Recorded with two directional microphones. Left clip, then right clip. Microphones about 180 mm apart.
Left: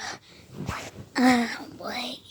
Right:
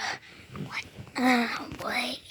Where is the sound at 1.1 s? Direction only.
30° left (ahead or behind).